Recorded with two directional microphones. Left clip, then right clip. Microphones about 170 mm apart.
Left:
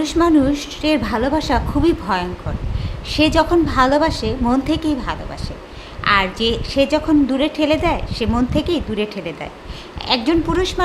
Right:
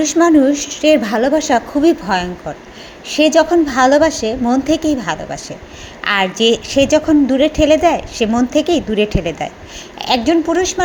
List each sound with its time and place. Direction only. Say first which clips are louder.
0.0 s a woman's voice: right 4 dB; 15° right (ahead or behind)
10.0 s a woman's voice: right 4 dB; 10° right (ahead or behind)